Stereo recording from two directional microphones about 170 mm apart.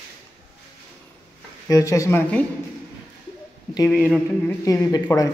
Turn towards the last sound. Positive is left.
turn(degrees=20)  # may be behind; listen again after turning